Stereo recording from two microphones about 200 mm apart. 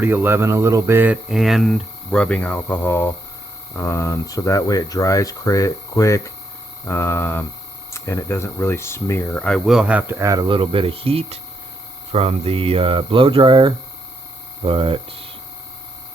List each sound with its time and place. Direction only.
0.0 s speech: 10° right (ahead or behind); by 15.3 s 25° right (ahead or behind)